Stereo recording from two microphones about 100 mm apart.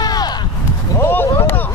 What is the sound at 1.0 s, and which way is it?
Speech, 25° left (ahead or behind).